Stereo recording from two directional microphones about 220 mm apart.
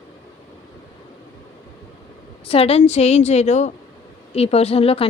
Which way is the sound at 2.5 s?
25° left (ahead or behind).